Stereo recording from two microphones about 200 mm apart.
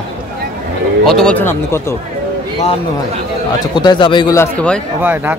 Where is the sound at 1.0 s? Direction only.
5° left (ahead or behind).